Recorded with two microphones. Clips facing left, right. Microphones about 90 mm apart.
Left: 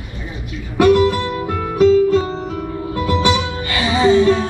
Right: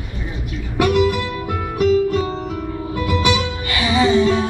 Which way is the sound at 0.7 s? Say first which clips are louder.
Left 4 dB; 25° left (ahead or behind).